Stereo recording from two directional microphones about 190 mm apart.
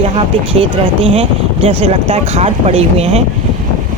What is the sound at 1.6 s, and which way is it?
Speech, 30° right (ahead or behind).